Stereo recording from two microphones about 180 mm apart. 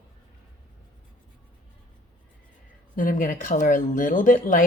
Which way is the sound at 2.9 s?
50° left (ahead or behind).